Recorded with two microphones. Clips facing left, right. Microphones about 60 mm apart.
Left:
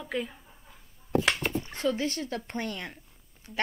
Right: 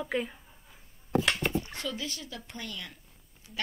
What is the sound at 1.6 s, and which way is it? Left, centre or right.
Speech, left.